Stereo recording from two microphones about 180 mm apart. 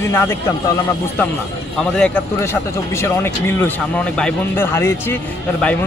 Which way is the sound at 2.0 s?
10° left (ahead or behind).